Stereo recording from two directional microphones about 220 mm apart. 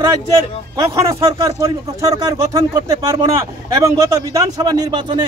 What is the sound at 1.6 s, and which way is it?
Speech, 15° right (ahead or behind).